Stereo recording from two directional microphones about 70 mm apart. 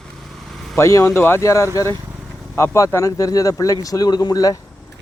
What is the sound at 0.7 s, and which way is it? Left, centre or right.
Speech, left.